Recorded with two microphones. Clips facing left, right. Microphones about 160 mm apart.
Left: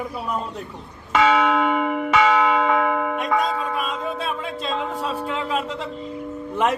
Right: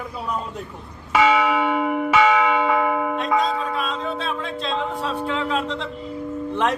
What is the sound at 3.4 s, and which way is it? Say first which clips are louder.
Music: right 1 dB; 10° left (ahead or behind).